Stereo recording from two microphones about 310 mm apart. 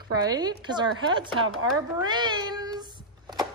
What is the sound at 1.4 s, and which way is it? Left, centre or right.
Speech, right.